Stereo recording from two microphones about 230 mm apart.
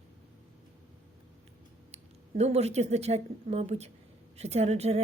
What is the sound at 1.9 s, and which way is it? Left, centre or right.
A woman's voice, right.